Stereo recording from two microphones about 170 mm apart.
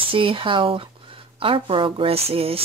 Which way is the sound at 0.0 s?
30° right (ahead or behind).